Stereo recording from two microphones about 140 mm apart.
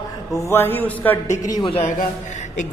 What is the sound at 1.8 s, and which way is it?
Speech, 60° left (ahead or behind).